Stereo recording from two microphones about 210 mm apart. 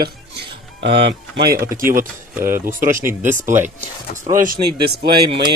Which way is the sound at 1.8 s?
40° right (ahead or behind).